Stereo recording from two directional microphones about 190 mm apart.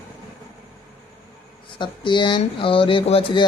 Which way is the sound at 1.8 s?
25° left (ahead or behind).